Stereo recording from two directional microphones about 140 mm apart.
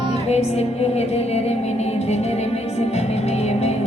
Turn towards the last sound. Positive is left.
turn(degrees=50)  # may be behind; listen again after turning